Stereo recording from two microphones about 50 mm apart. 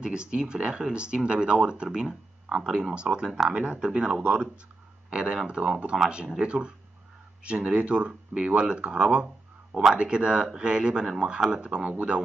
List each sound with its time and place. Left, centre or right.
0.0 s speech: centre
3.4 s speech: right